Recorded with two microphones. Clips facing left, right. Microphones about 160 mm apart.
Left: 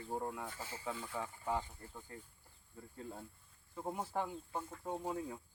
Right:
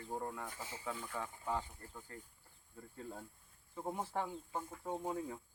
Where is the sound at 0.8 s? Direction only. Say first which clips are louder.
Left 1 dB; 15° left (ahead or behind).